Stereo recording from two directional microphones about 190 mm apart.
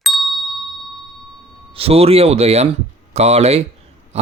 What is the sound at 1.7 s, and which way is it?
Speech, 30° right (ahead or behind).